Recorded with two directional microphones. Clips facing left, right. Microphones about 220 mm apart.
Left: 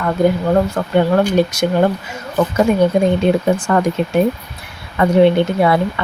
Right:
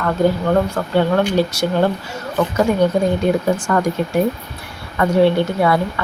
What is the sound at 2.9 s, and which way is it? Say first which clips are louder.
Speech: left 3 dB; 20° left (ahead or behind).